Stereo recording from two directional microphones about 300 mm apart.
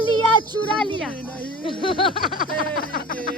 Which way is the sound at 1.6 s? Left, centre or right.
Centre.